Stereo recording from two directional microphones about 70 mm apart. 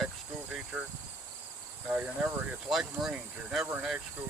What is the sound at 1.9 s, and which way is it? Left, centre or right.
Speech, right.